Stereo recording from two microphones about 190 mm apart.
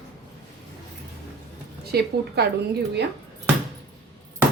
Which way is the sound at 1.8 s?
55° right (ahead or behind).